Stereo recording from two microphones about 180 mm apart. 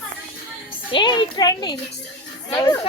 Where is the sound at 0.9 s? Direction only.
25° left (ahead or behind).